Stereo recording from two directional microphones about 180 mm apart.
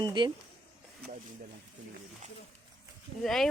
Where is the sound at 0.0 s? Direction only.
25° right (ahead or behind).